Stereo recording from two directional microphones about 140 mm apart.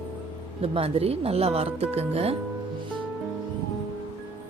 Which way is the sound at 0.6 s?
45° right (ahead or behind).